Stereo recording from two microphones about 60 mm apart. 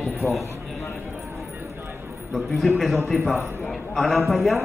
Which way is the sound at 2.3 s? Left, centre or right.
Centre.